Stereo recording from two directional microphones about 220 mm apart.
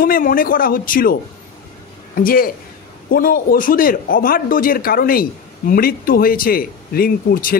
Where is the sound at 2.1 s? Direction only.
40° left (ahead or behind).